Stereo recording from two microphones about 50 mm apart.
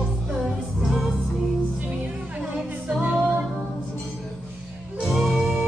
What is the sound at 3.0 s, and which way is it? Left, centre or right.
Music, right.